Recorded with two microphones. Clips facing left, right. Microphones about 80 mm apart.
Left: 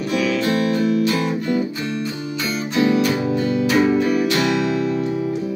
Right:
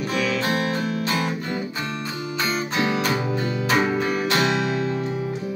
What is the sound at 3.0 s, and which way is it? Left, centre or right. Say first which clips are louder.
Music: left 5 dB; right.